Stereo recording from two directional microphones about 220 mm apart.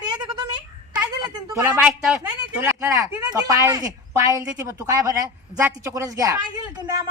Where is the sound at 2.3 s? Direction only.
10° right (ahead or behind).